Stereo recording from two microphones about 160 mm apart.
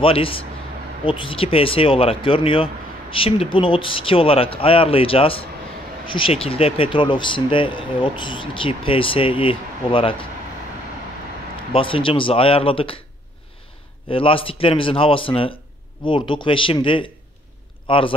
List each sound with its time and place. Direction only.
0.0 s speech: 35° left (ahead or behind)
11.7 s speech: 35° left (ahead or behind)
14.0 s speech: 35° left (ahead or behind)